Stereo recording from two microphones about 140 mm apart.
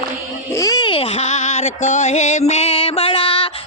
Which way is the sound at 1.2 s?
55° left (ahead or behind).